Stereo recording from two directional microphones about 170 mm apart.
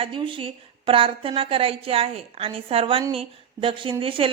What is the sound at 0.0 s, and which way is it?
A woman's voice, 30° right (ahead or behind).